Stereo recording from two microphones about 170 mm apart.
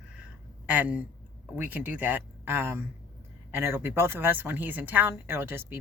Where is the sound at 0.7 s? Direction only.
10° right (ahead or behind).